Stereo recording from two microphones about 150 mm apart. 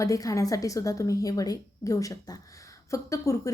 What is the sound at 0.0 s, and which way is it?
A woman's voice, 20° left (ahead or behind).